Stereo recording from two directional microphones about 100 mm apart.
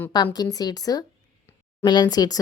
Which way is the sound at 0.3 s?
40° left (ahead or behind).